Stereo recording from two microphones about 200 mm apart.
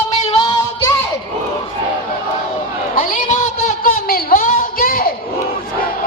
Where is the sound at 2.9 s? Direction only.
40° left (ahead or behind).